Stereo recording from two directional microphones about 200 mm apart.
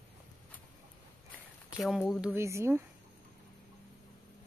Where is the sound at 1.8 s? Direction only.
Centre (ahead or behind).